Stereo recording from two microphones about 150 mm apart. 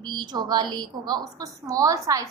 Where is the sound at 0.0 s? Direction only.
30° right (ahead or behind).